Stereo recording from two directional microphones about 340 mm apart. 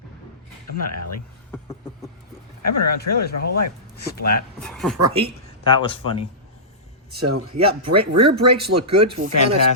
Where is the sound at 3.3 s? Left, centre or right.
Left.